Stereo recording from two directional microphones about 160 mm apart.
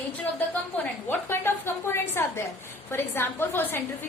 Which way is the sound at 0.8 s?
15° left (ahead or behind).